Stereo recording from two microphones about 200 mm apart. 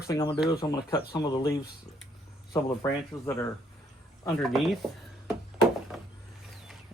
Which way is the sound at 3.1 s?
15° left (ahead or behind).